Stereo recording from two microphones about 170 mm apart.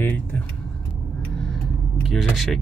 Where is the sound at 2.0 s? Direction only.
Centre (ahead or behind).